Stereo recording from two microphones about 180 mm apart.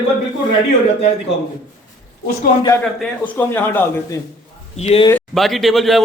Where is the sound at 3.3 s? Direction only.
10° left (ahead or behind).